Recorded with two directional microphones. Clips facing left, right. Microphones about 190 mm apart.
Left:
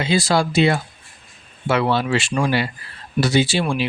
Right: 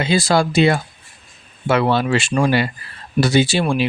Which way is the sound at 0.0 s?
50° right (ahead or behind).